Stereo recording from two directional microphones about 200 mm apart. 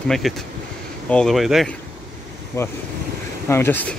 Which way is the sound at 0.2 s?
Centre (ahead or behind).